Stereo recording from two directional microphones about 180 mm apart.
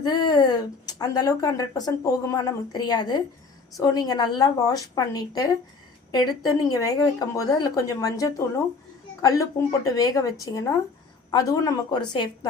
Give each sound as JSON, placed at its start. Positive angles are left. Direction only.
{"t": 0.0, "sound": "a woman's voice", "side_deg": 25}